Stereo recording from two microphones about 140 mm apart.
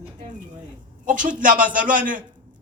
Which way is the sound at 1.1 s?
70° right (ahead or behind).